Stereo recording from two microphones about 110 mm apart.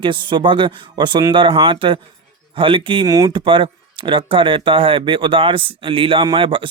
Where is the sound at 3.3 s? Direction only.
50° right (ahead or behind).